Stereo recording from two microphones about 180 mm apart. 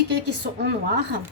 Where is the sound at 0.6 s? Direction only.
70° right (ahead or behind).